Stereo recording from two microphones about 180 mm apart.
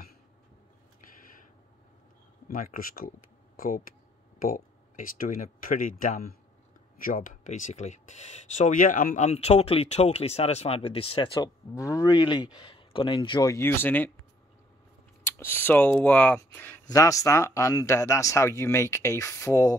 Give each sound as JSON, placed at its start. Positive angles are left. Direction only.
{"t": 2.4, "sound": "speech", "side_deg": 50}
{"t": 15.2, "sound": "speech", "side_deg": 10}